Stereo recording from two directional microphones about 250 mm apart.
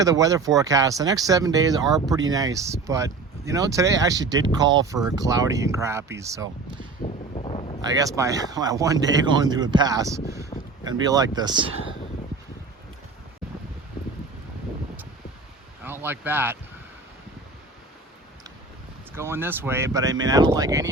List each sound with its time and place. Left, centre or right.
0.0 s speech: centre
7.0 s a sound: left
7.9 s speech: centre
10.5 s a sound: left
10.8 s speech: centre
15.8 s speech: centre
19.1 s speech: centre